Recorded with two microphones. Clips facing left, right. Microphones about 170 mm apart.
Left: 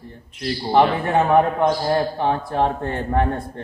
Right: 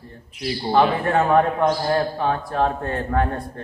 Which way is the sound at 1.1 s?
20° left (ahead or behind).